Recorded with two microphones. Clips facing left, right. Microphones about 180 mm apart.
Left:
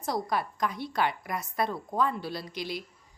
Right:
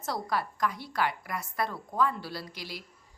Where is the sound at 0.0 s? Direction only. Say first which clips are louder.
Left 2 dB; 15° left (ahead or behind).